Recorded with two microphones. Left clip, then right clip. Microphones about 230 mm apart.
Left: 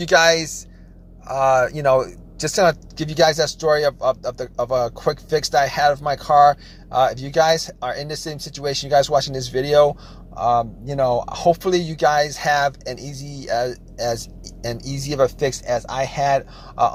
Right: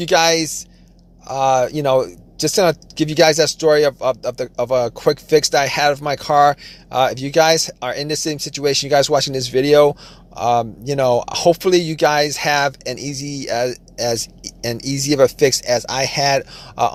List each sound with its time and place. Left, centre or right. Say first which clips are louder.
0.0 s speech: even; right
3.3 s speech: right 4 dB; right
7.8 s speech: right 3 dB; right
8.1 s speech: right 7 dB; right
16.0 s speech: right 2 dB; right